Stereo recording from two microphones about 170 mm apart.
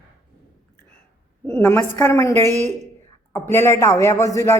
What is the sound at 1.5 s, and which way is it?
A woman's voice, 15° left (ahead or behind).